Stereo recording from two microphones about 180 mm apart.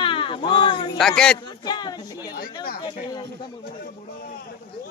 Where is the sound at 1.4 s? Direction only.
25° left (ahead or behind).